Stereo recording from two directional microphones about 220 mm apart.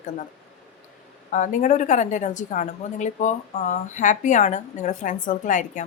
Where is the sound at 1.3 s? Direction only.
35° left (ahead or behind).